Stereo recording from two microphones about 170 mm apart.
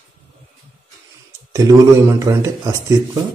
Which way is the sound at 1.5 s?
20° right (ahead or behind).